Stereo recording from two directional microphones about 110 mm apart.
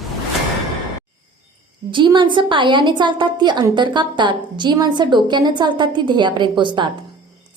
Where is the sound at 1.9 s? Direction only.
45° right (ahead or behind).